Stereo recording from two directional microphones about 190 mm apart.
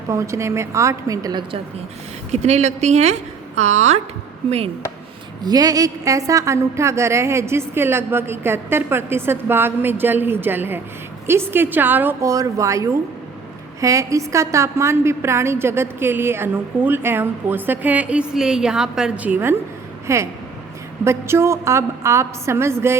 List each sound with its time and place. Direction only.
0.1 s a woman's voice: 15° right (ahead or behind)
2.3 s a woman's voice: 35° right (ahead or behind)
5.4 s a woman's voice: 20° right (ahead or behind)